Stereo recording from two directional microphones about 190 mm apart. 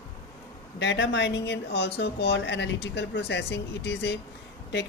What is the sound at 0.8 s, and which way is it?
Speech, 70° left (ahead or behind).